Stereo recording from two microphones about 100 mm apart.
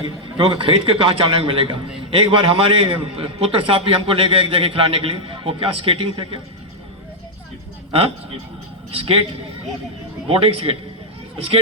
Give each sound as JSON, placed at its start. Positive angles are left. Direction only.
{"t": 0.0, "sound": "a man's voice", "side_deg": -60}
{"t": 8.9, "sound": "speech", "side_deg": -70}
{"t": 10.2, "sound": "a man's voice", "side_deg": -65}